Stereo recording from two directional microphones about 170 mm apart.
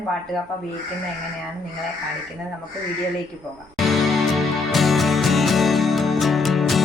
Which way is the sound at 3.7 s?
Centre (ahead or behind).